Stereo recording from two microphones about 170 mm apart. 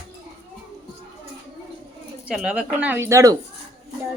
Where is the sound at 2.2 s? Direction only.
5° right (ahead or behind).